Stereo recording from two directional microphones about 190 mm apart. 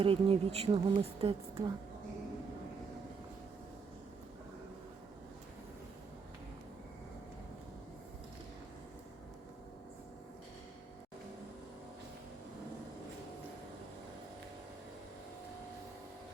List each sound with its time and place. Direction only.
0.0 s speech: 30° right (ahead or behind)